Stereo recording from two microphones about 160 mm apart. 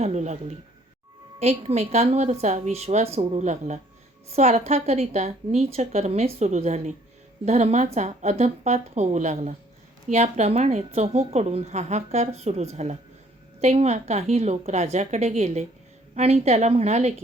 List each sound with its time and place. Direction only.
0.0 s a woman's voice: 45° right (ahead or behind)